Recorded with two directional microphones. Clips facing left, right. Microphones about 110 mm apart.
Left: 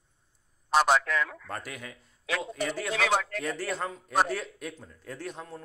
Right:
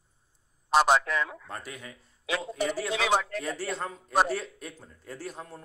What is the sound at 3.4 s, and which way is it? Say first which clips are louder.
A man's voice: left 1 dB; centre (ahead or behind).